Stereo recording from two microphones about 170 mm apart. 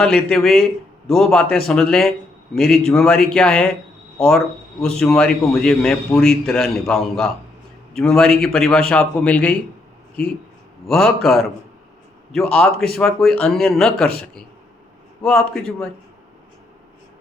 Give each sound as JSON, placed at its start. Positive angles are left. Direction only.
{"t": 0.0, "sound": "a man's voice", "side_deg": 5}
{"t": 10.8, "sound": "a man's voice", "side_deg": 0}
{"t": 15.2, "sound": "a man's voice", "side_deg": 5}